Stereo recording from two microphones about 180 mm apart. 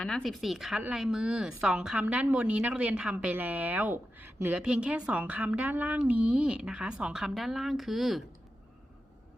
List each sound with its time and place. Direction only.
0.0 s speech: 5° left (ahead or behind)